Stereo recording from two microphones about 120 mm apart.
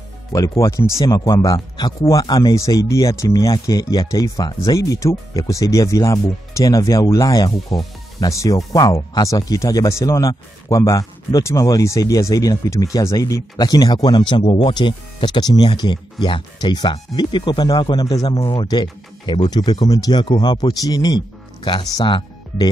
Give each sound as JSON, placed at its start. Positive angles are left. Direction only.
{"t": 0.3, "sound": "speech", "side_deg": 25}